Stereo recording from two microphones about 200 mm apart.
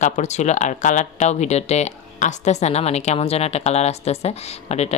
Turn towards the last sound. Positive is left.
turn(degrees=35)  # may be behind; listen again after turning